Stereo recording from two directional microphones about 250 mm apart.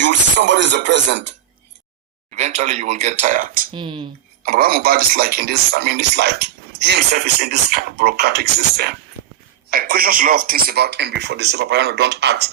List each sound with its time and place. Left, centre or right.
0.0 s speech: right
2.3 s speech: right
3.7 s speech: centre
4.4 s a man's voice: right